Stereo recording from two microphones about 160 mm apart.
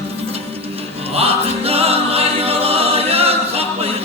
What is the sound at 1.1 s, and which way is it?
Music, 40° right (ahead or behind).